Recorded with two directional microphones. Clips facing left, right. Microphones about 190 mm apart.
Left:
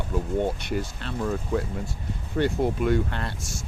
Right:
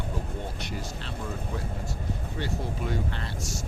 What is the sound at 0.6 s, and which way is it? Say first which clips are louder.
Speech: left 6 dB; 60° left (ahead or behind).